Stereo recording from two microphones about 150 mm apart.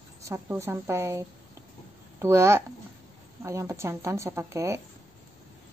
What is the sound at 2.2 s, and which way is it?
A woman's voice, 20° right (ahead or behind).